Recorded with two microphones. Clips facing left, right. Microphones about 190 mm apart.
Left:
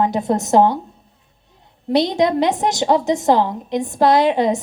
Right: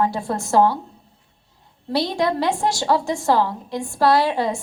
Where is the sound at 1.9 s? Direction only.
20° left (ahead or behind).